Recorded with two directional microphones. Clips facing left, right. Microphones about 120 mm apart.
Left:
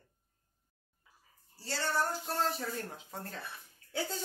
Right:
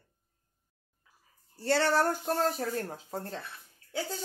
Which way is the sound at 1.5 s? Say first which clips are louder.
Right 9 dB; 65° right (ahead or behind).